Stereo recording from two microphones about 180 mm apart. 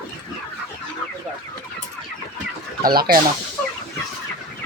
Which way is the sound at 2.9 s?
55° right (ahead or behind).